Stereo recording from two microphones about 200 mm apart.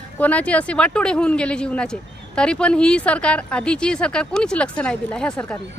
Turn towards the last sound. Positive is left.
turn(degrees=5)  # may be behind; listen again after turning